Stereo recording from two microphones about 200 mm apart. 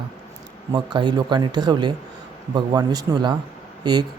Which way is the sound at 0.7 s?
20° right (ahead or behind).